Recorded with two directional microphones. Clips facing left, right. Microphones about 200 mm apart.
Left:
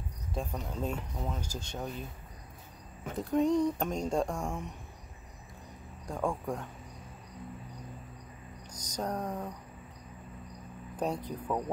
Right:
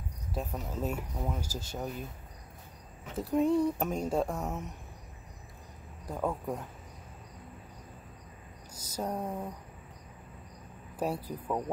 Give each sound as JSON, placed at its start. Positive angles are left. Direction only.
{"t": 0.3, "sound": "speech", "side_deg": -5}
{"t": 3.2, "sound": "speech", "side_deg": -5}
{"t": 6.0, "sound": "speech", "side_deg": -5}
{"t": 8.7, "sound": "speech", "side_deg": -5}
{"t": 11.0, "sound": "speech", "side_deg": -5}